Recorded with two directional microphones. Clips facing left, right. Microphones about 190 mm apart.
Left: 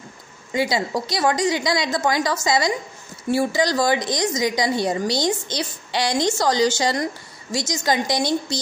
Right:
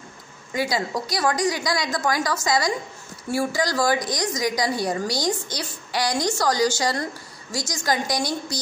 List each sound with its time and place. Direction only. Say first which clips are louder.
0.5 s a woman's voice: left 3 dB; 25° left (ahead or behind)